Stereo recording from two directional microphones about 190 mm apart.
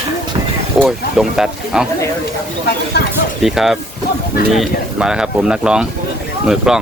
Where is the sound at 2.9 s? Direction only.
60° left (ahead or behind).